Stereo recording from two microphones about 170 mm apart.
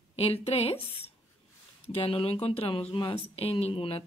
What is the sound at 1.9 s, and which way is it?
Speech, 35° left (ahead or behind).